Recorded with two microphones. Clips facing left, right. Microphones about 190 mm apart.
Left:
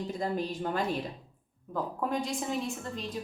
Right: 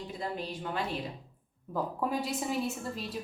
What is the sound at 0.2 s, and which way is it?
Speech, 45° left (ahead or behind).